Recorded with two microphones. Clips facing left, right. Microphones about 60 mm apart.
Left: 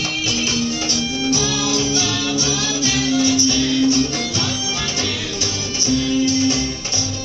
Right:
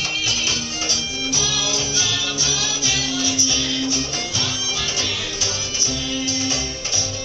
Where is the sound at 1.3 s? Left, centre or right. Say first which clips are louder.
Left 4 dB; left.